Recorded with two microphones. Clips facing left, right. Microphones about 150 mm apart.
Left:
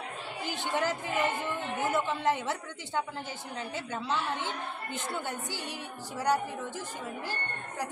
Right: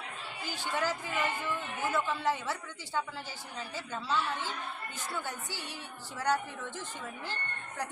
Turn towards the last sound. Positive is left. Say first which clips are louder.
# left 3 dB
turn(degrees=15)  # may be behind; listen again after turning